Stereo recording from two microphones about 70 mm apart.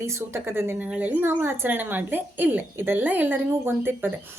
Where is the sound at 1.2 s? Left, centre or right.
Right.